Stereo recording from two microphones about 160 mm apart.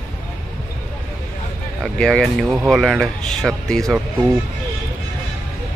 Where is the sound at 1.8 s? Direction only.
Centre (ahead or behind).